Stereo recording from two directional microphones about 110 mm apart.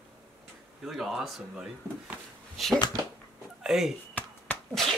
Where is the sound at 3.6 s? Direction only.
5° right (ahead or behind).